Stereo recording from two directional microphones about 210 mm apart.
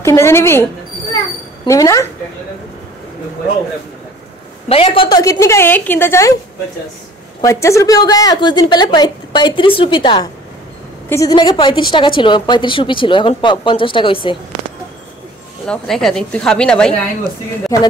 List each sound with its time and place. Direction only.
0.0 s a woman's voice: 10° left (ahead or behind)
4.6 s a woman's voice: 25° left (ahead or behind); by 6.3 s 10° left (ahead or behind)
7.4 s a woman's voice: 15° left (ahead or behind)
15.6 s speech: 5° left (ahead or behind)
17.7 s a woman's voice: 15° left (ahead or behind)